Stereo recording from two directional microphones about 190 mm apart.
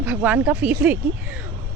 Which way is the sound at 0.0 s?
10° right (ahead or behind).